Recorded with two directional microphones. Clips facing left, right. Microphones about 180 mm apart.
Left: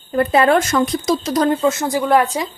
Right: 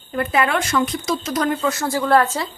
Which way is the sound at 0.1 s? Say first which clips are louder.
Left 6 dB; 35° left (ahead or behind).